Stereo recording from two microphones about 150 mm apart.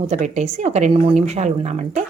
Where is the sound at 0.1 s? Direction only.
50° right (ahead or behind).